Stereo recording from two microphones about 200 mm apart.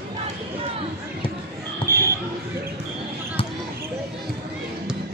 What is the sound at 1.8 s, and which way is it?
Basketball bounce, 25° left (ahead or behind).